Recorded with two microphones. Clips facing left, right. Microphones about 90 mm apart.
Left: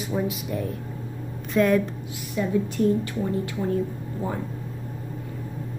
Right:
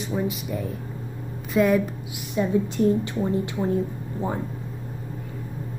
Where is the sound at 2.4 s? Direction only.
25° right (ahead or behind).